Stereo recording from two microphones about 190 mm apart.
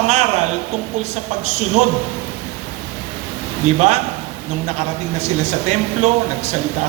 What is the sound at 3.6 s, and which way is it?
Speech, 35° right (ahead or behind).